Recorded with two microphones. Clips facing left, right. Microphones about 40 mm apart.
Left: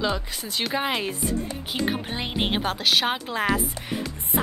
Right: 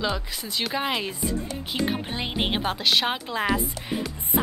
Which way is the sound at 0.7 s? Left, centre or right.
Centre.